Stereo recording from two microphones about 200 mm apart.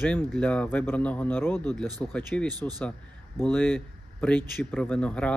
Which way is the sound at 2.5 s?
20° right (ahead or behind).